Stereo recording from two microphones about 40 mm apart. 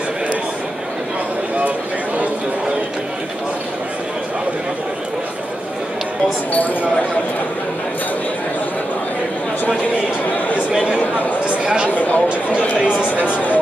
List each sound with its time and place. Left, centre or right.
10.7 s a sound: right
11.6 s speech: right
11.9 s speech: left